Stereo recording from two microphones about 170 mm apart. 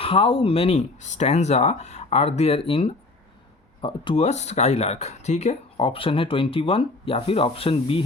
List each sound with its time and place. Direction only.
0.0 s speech: 35° left (ahead or behind)